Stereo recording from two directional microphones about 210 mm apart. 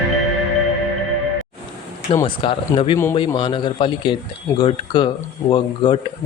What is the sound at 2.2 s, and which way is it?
Speech, 25° left (ahead or behind).